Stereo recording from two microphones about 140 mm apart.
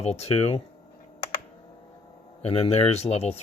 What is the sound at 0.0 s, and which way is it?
Speech, 50° left (ahead or behind).